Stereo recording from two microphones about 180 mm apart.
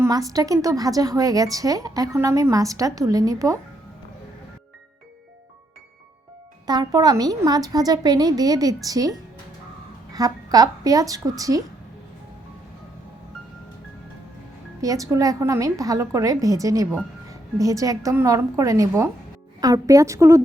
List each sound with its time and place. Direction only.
0.0 s a woman's voice: 20° right (ahead or behind)
6.7 s a woman's voice: 20° right (ahead or behind)
14.8 s a woman's voice: 20° right (ahead or behind)